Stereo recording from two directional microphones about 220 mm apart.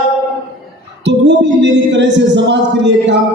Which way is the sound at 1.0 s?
55° right (ahead or behind).